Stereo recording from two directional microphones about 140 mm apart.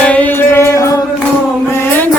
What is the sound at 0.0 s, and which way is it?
Music, 10° left (ahead or behind).